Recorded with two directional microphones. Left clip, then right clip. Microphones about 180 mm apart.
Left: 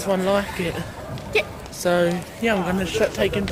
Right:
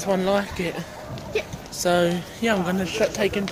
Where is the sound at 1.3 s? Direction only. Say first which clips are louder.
Left 5 dB; 65° left (ahead or behind).